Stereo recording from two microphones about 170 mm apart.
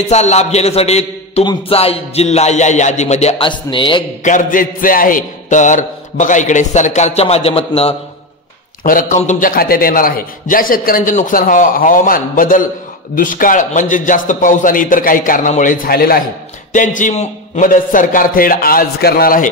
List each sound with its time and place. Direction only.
0.1 s music: 40° left (ahead or behind)
4.2 s a man's voice: 50° left (ahead or behind)
8.8 s a man's voice: 50° left (ahead or behind)
16.7 s a man's voice: 50° left (ahead or behind)